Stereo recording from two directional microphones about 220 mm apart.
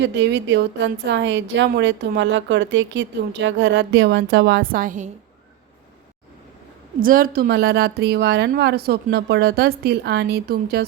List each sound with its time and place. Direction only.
0.0 s a woman's voice: 50° right (ahead or behind); by 5.1 s 35° right (ahead or behind)
7.0 s a woman's voice: 40° right (ahead or behind)